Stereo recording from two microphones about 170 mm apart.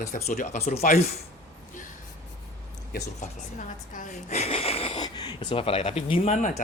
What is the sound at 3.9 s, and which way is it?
Speech, 45° left (ahead or behind).